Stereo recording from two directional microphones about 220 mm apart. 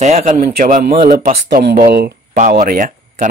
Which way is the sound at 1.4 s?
45° right (ahead or behind).